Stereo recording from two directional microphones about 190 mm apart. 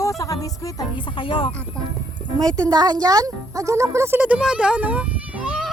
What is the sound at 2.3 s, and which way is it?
Music, 20° right (ahead or behind).